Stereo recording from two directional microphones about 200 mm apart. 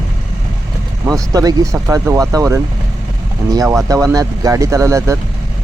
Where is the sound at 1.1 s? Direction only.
20° right (ahead or behind).